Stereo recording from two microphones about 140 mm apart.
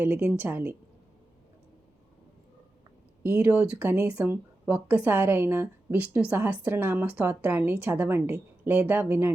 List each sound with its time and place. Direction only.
0.0 s speech: 10° right (ahead or behind)
3.2 s speech: 15° right (ahead or behind)